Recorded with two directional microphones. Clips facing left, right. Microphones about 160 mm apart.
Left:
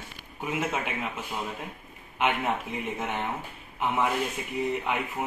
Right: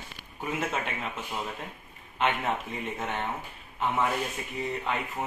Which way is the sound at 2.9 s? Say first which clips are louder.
Even; 10° left (ahead or behind).